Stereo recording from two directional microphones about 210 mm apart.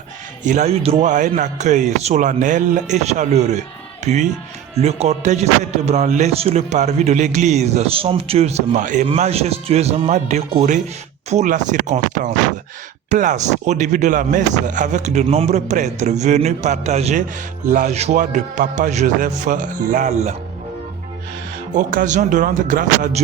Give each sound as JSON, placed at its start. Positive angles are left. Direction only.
{"t": 0.4, "sound": "a man's voice", "side_deg": -35}
{"t": 21.8, "sound": "a man's voice", "side_deg": -40}